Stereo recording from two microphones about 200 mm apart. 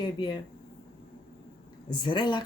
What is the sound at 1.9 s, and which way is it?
Speech, 25° left (ahead or behind).